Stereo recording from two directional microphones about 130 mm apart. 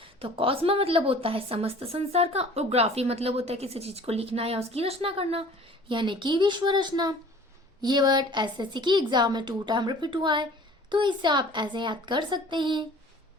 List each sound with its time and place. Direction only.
0.0 s a woman's voice: 45° right (ahead or behind)